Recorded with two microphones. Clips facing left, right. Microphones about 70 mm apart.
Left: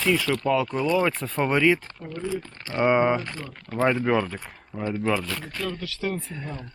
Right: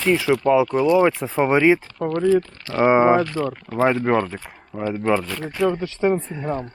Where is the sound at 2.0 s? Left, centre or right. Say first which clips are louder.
Right 13 dB; right.